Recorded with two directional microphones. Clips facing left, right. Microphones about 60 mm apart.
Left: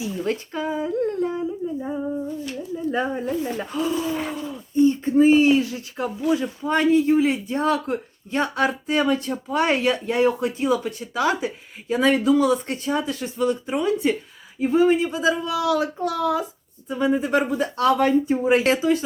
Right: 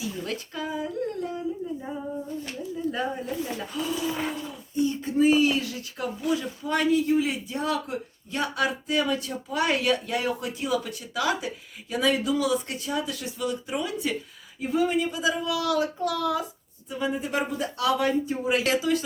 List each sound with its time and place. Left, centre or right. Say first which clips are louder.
0.0 s humming: left 6 dB; left
2.9 s speech: left 6 dB; left
15.4 s speech: left 3 dB; left
16.9 s speech: left 7 dB; left